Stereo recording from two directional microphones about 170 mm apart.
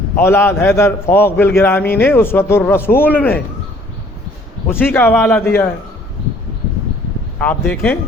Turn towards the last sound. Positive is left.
turn(degrees=10)  # may be behind; listen again after turning